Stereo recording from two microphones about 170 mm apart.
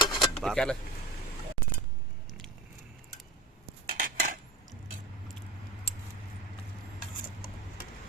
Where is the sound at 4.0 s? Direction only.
55° right (ahead or behind).